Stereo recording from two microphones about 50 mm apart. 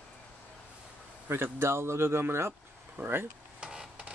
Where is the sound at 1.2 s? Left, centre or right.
Right.